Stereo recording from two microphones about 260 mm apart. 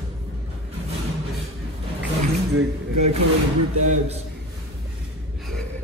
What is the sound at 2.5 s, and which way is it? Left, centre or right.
Speech, right.